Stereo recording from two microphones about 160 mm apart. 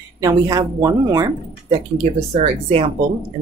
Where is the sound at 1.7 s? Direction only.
40° right (ahead or behind).